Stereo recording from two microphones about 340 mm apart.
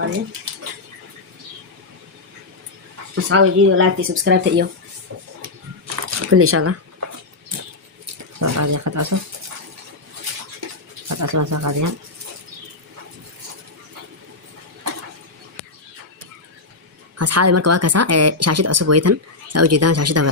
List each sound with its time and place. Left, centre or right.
3.2 s speech: right
5.9 s a sound: right
8.4 s speech: right
11.1 s speech: right
17.2 s speech: right